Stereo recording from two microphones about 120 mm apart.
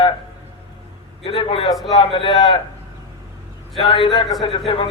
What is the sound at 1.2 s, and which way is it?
A man's voice, 50° left (ahead or behind).